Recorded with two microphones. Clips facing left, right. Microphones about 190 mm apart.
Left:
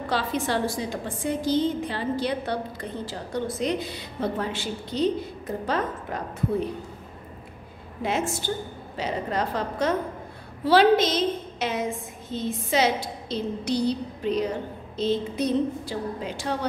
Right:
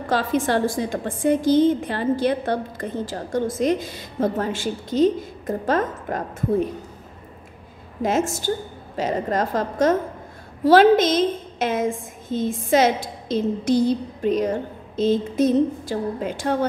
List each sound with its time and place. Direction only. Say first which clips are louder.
0.1 s a woman's voice: right 6 dB; 50° right (ahead or behind)
8.0 s a woman's voice: right 5 dB; 45° right (ahead or behind)